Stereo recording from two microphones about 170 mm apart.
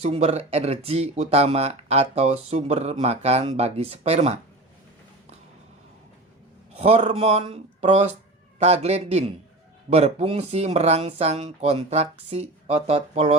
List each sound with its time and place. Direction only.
0.0 s speech: 35° right (ahead or behind)
6.7 s speech: 35° right (ahead or behind)